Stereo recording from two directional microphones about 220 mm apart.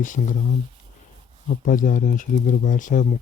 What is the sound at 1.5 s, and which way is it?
Speech, 35° left (ahead or behind).